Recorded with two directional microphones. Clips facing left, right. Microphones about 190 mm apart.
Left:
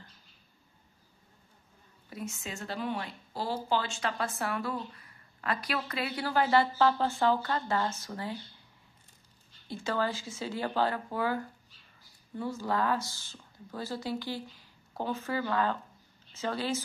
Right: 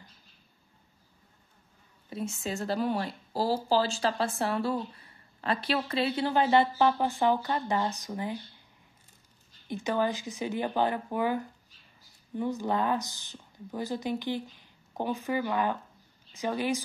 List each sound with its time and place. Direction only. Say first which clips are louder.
2.0 s speech: right 6 dB; 30° right (ahead or behind)
9.7 s a woman's voice: right 3 dB; 15° right (ahead or behind)